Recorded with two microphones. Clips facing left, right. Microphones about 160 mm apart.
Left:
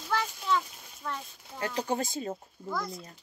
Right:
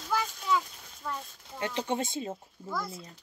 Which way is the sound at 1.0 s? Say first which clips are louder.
Even; 5° right (ahead or behind).